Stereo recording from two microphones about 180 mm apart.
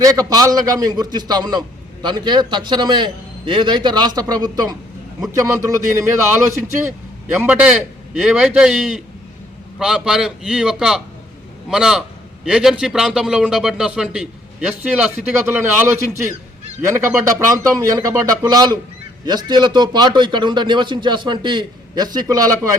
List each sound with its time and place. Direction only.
0.0 s a man's voice: 20° right (ahead or behind)
17.5 s a man's voice: 20° right (ahead or behind)